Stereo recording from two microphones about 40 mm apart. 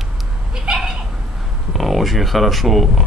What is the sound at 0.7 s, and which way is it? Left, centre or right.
Cat, centre.